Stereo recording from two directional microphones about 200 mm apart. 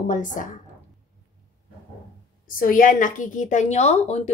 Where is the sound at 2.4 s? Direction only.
45° left (ahead or behind).